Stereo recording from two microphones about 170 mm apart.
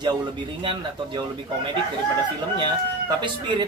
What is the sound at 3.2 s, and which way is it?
Speech, 25° right (ahead or behind).